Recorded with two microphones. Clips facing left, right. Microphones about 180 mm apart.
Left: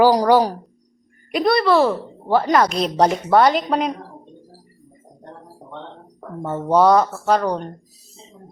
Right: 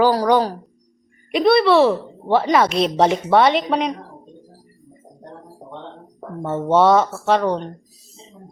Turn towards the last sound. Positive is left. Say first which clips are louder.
# right 1 dB
turn(degrees=0)  # may be behind; listen again after turning